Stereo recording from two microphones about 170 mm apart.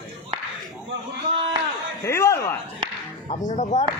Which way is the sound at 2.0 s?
15° left (ahead or behind).